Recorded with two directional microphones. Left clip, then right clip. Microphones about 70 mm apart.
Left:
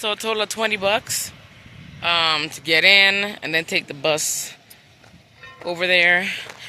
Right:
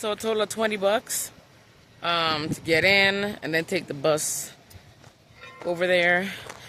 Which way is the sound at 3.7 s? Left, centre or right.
Right.